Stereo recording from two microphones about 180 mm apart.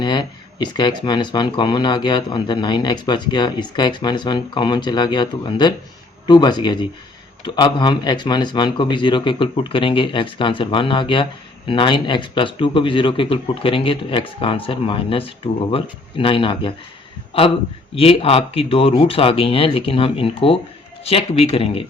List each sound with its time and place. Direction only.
0.0 s speech: 25° left (ahead or behind)
17.9 s speech: 35° left (ahead or behind)